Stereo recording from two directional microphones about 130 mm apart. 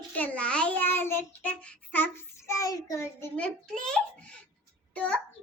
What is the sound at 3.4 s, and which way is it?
A child's voice, 5° left (ahead or behind).